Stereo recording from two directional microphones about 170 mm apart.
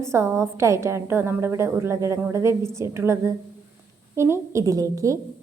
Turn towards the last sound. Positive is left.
turn(degrees=-20)  # may be behind; listen again after turning